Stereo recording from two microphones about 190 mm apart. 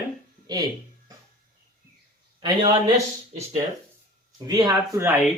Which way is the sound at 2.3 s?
20° right (ahead or behind).